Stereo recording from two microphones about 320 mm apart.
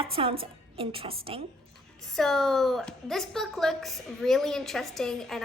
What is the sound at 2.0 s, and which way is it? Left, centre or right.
A woman's voice, centre.